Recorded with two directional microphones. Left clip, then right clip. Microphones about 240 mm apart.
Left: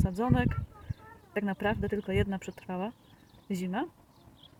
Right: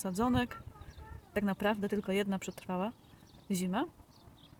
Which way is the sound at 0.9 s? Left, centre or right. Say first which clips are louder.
Left 6 dB; right.